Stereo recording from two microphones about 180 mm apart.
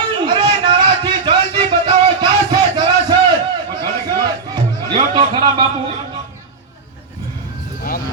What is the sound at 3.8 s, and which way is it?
Music, 25° right (ahead or behind).